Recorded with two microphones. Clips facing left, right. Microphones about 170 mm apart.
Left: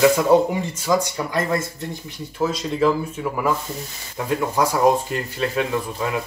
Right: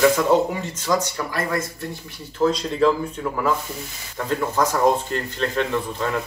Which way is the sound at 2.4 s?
5° left (ahead or behind).